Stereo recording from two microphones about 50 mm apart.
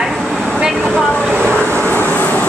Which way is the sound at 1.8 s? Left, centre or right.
Left.